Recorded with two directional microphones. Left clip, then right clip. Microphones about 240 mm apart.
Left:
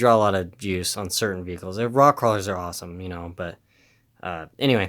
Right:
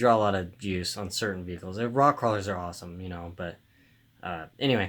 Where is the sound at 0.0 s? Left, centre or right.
Left.